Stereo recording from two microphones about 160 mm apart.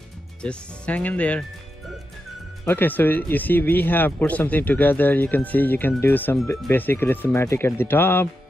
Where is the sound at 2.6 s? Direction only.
10° left (ahead or behind).